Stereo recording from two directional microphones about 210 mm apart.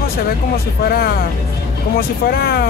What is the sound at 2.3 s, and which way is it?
Speech, 50° left (ahead or behind).